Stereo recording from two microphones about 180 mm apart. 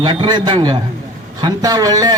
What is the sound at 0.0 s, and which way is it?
A man's voice, 25° right (ahead or behind).